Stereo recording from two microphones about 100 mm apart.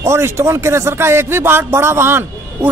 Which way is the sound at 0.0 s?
25° right (ahead or behind).